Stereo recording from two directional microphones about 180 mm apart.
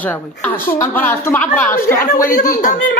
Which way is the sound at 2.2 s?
50° left (ahead or behind).